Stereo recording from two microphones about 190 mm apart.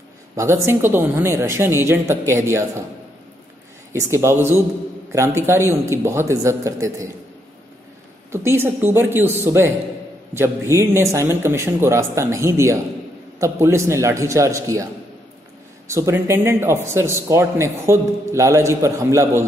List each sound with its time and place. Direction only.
0.4 s a man's voice: 15° right (ahead or behind)
3.9 s a man's voice: 15° right (ahead or behind)
8.3 s a man's voice: 15° right (ahead or behind)
15.9 s a man's voice: 15° right (ahead or behind)